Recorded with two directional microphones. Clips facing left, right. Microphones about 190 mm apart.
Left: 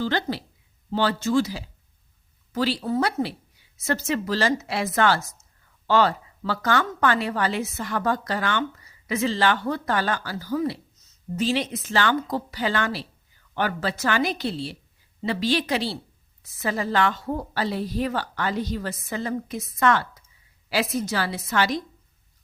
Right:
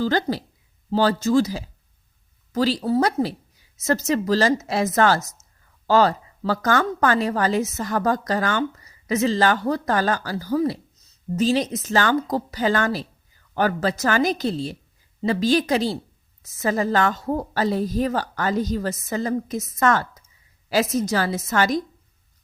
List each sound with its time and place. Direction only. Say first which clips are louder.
0.0 s a woman's voice: right 4 dB; 40° right (ahead or behind)